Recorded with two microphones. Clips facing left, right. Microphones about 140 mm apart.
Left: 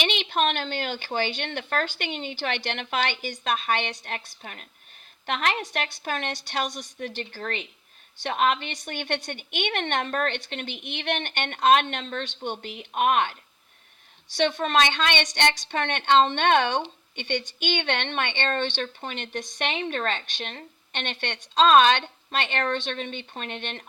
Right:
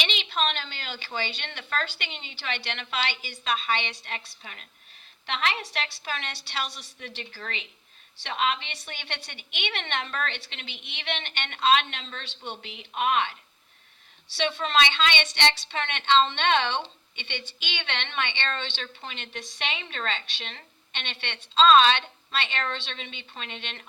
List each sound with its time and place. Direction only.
0.0 s a woman's voice: 50° left (ahead or behind)
14.3 s a woman's voice: 50° left (ahead or behind)